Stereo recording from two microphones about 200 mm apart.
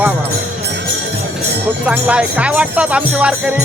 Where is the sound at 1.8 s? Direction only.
5° right (ahead or behind).